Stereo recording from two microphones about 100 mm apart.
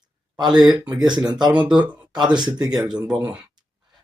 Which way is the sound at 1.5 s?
10° right (ahead or behind).